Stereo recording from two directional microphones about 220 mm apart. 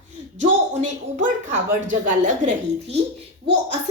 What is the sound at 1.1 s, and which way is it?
A woman's voice, 35° right (ahead or behind).